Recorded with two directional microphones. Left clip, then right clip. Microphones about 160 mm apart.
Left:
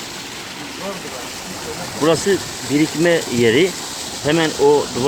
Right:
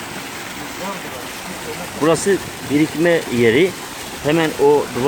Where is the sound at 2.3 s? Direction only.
15° right (ahead or behind).